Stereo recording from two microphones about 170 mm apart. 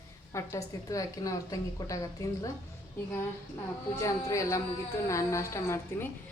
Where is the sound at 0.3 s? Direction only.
20° left (ahead or behind).